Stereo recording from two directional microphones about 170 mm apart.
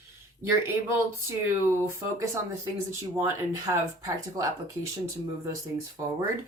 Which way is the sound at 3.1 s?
15° right (ahead or behind).